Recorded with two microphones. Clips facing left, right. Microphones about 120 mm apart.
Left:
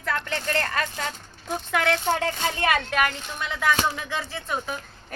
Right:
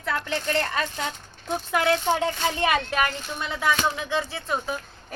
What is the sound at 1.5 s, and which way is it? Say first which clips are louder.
Speech: right 1 dB; 15° right (ahead or behind).